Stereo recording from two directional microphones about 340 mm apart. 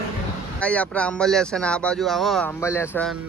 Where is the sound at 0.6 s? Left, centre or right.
Centre.